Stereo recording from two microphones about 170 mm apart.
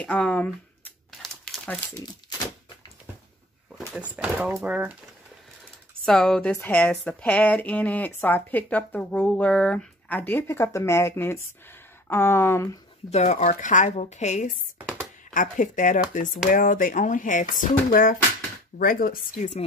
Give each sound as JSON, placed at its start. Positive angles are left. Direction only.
{"t": 0.0, "sound": "crumpling", "side_deg": 5}
{"t": 2.0, "sound": "speech", "side_deg": 25}
{"t": 3.9, "sound": "speech", "side_deg": -10}
{"t": 6.0, "sound": "a woman's voice", "side_deg": 5}
{"t": 13.1, "sound": "speech", "side_deg": 40}